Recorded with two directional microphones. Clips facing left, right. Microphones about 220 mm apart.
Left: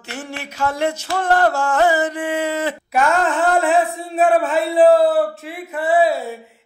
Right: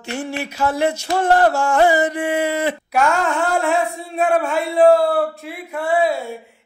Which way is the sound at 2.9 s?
Centre (ahead or behind).